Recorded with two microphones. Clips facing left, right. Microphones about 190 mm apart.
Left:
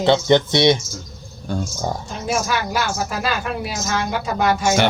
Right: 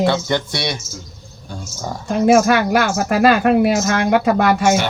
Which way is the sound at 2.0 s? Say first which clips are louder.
Right 17 dB; 60° right (ahead or behind).